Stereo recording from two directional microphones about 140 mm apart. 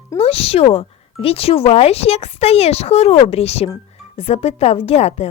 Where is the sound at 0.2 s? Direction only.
45° left (ahead or behind).